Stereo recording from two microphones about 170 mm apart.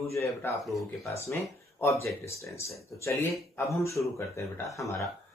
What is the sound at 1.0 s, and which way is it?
Speech, 15° left (ahead or behind).